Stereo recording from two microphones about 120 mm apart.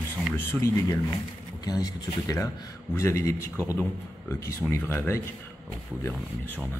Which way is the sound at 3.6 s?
15° right (ahead or behind).